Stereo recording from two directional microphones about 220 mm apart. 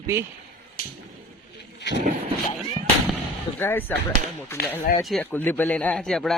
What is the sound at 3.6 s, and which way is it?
Speech, 10° left (ahead or behind).